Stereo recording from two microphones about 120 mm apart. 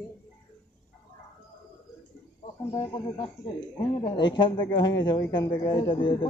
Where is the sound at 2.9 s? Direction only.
35° left (ahead or behind).